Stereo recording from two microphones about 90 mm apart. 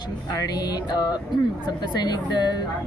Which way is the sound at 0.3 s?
50° left (ahead or behind).